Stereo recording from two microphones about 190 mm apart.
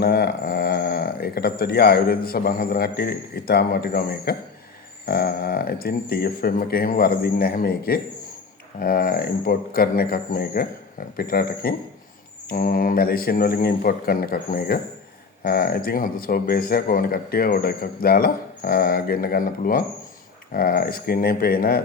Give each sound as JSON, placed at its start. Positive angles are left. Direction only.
{"t": 0.0, "sound": "a man's voice", "side_deg": 55}